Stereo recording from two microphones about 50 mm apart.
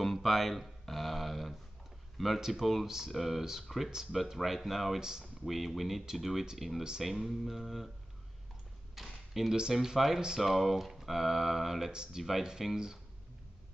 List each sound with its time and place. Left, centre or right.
0.0 s a sound: centre
2.1 s speech: centre
8.9 s a sound: centre
9.6 s speech: centre
11.9 s speech: centre
12.2 s speech: centre